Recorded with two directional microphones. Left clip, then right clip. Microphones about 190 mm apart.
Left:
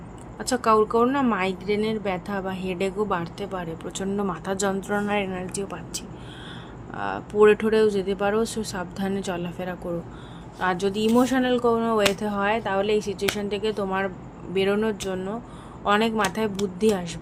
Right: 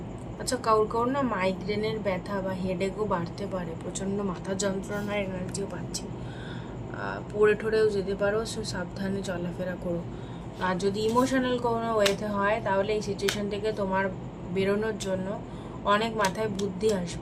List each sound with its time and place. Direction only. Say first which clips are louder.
0.4 s speech: left 4 dB; 55° left (ahead or behind)